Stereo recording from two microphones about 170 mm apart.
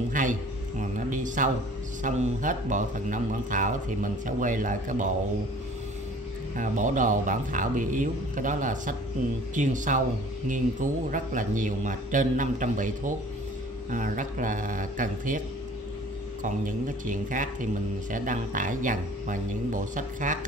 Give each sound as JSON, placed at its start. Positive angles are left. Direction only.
{"t": 0.1, "sound": "a sound", "side_deg": -50}
{"t": 2.0, "sound": "speech", "side_deg": -45}
{"t": 6.5, "sound": "speech", "side_deg": -50}
{"t": 16.4, "sound": "speech", "side_deg": -50}